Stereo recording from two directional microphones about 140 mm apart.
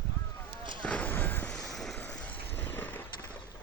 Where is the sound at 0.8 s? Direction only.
10° left (ahead or behind).